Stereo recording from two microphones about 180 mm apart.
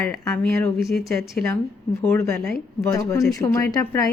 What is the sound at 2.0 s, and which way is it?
A woman's voice, 15° left (ahead or behind).